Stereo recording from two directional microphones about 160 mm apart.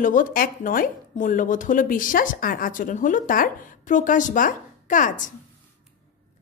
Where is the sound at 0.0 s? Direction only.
55° left (ahead or behind).